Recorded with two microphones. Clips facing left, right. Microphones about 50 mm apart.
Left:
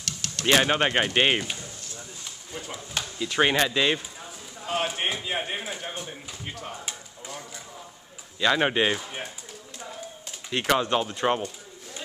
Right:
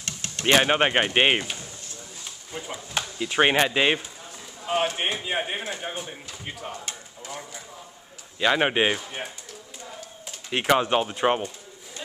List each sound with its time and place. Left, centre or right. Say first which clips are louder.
0.0 s speech: right 1 dB; right
2.5 s speech: right 3 dB; centre
4.9 s speech: right 2 dB; centre
6.7 s speech: right 1 dB; centre
7.2 s speech: right 2 dB; centre
8.9 s speech: even; centre
10.5 s speech: right 2 dB; centre